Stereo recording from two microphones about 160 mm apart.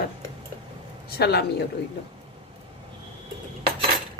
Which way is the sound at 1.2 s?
80° left.